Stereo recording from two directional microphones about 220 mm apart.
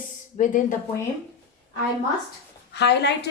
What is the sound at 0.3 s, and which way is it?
Speech, 35° left (ahead or behind).